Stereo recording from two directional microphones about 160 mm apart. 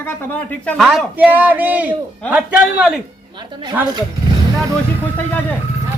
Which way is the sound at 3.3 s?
30° right (ahead or behind).